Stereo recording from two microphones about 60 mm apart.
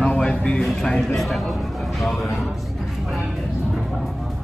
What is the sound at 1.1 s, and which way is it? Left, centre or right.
Speech, centre.